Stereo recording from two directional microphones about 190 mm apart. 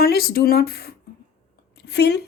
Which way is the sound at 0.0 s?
55° left (ahead or behind).